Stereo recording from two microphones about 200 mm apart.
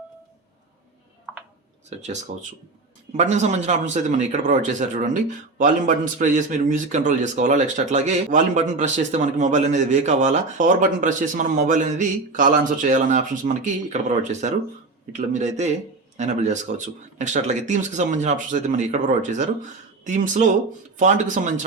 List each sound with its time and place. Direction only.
1.9 s a man's voice: 35° right (ahead or behind)